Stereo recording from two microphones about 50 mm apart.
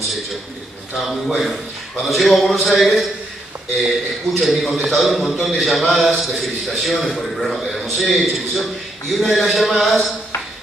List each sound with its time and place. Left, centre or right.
0.9 s a man's voice: centre